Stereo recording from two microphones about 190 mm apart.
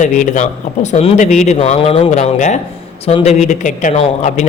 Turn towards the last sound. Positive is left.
turn(degrees=35)  # may be behind; listen again after turning